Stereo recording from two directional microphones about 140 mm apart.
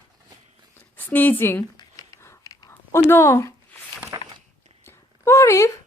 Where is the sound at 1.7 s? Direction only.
25° left (ahead or behind).